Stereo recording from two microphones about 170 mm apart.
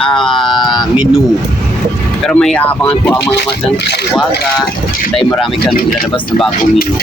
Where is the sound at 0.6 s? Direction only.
25° left (ahead or behind).